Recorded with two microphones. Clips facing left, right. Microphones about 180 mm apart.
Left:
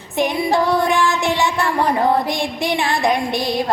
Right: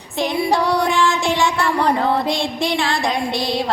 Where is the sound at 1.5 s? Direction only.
15° left (ahead or behind).